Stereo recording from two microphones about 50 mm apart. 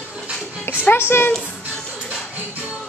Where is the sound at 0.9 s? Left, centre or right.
Left.